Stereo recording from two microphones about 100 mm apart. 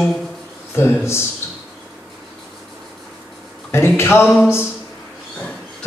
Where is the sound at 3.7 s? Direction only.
25° left (ahead or behind).